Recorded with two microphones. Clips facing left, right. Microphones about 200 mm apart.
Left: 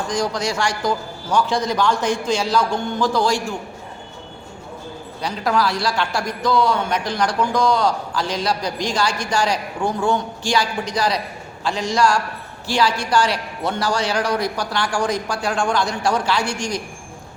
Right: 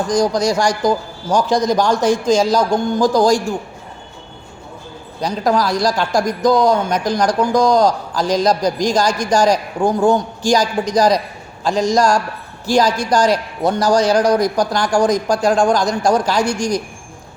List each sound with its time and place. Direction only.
0.1 s a man's voice: 40° right (ahead or behind)
5.2 s a man's voice: 40° right (ahead or behind)